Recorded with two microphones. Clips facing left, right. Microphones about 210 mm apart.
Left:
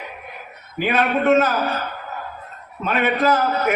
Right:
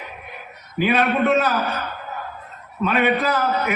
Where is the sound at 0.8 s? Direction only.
45° left (ahead or behind).